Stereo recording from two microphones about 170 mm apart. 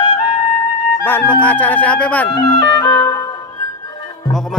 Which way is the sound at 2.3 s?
25° left (ahead or behind).